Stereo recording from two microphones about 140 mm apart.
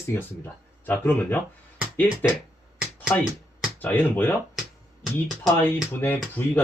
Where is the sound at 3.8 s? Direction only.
15° left (ahead or behind).